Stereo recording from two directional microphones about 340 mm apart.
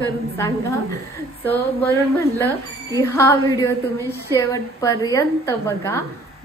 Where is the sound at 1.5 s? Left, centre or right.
Centre.